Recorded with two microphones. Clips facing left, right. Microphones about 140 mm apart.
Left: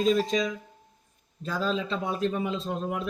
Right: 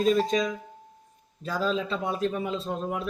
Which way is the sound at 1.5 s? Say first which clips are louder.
Right 1 dB; 5° right (ahead or behind).